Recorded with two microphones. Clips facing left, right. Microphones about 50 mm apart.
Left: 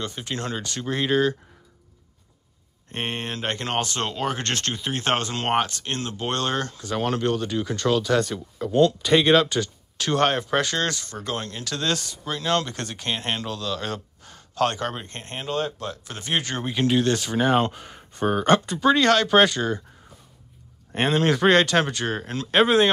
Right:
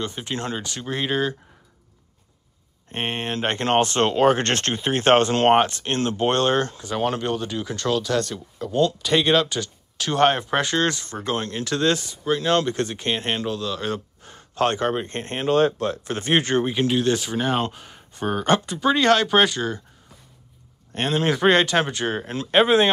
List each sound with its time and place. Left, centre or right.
0.0 s speech: centre
0.7 s speech: centre
2.9 s speech: right
6.8 s speech: centre
10.2 s speech: centre; by 16.6 s right
16.8 s speech: centre
21.1 s speech: centre